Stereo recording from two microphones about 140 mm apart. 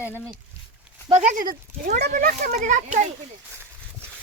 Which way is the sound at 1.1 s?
65° right (ahead or behind).